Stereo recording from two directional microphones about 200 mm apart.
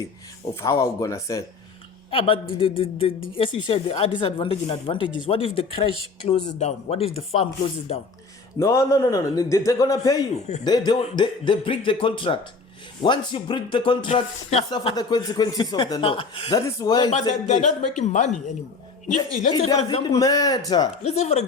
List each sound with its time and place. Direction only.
0.6 s a man's voice: 15° left (ahead or behind)
2.0 s speech: 25° left (ahead or behind)
8.5 s a man's voice: 15° left (ahead or behind)
17.4 s speech: 35° left (ahead or behind)
20.1 s a man's voice: 20° left (ahead or behind)
21.0 s speech: 30° left (ahead or behind)